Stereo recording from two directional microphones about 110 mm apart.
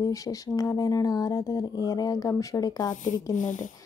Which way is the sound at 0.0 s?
30° left (ahead or behind).